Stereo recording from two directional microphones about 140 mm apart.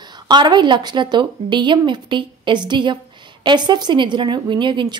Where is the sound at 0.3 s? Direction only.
30° right (ahead or behind).